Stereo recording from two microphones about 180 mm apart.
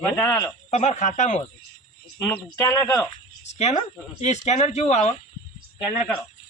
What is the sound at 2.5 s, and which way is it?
Speech, 15° left (ahead or behind).